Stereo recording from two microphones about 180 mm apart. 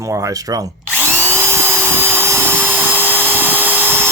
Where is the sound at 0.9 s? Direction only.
10° right (ahead or behind).